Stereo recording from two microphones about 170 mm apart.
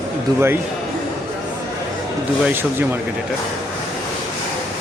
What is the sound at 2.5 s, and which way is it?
Speech, 10° right (ahead or behind).